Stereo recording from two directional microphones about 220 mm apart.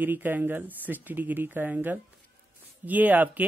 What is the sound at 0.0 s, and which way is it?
Speech, 10° right (ahead or behind).